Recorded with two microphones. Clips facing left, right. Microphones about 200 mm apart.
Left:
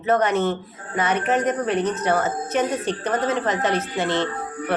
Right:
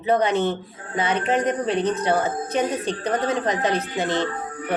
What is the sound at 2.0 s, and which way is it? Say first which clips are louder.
Speech: even; 15° right (ahead or behind).